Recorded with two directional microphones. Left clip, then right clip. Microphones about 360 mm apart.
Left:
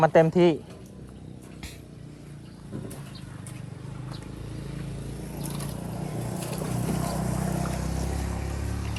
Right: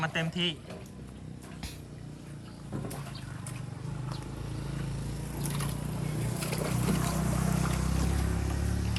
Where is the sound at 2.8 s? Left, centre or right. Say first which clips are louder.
Even; centre.